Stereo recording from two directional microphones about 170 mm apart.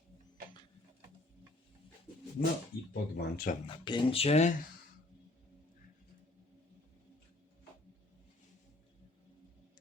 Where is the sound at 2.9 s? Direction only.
65° left (ahead or behind).